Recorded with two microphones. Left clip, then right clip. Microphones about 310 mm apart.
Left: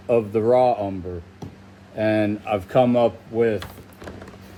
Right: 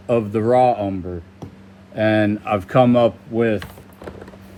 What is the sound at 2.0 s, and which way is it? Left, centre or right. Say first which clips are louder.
Speech: right 3 dB; right.